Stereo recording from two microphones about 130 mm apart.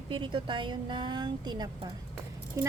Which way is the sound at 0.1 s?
40° right (ahead or behind).